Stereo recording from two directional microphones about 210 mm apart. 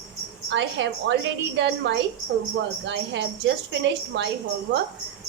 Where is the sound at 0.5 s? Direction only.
60° right (ahead or behind).